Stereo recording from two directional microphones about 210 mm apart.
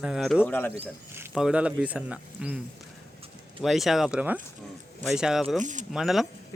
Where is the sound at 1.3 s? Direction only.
5° right (ahead or behind).